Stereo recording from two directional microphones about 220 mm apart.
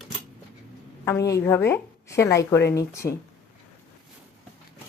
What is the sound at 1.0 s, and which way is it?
A woman's voice, 15° left (ahead or behind).